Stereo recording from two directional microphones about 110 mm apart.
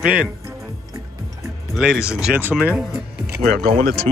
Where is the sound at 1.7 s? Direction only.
5° right (ahead or behind).